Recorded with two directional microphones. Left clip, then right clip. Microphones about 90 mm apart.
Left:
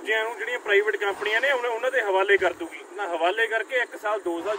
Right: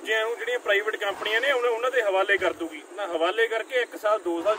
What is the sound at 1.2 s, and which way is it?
Speech, 45° right (ahead or behind).